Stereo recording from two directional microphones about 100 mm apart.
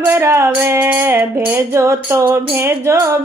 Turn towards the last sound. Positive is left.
turn(degrees=-25)  # may be behind; listen again after turning